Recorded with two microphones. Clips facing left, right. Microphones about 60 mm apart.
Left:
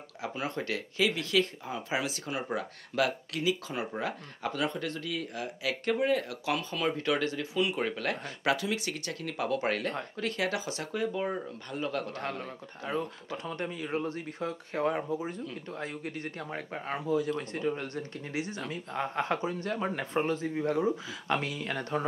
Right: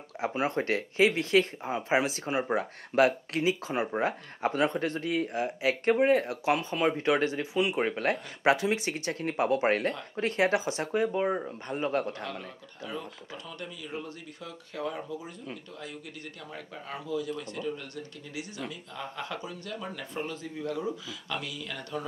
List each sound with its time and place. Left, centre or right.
0.2 s speech: right
12.1 s speech: left